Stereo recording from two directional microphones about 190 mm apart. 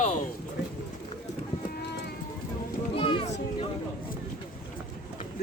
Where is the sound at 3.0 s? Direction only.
30° left (ahead or behind).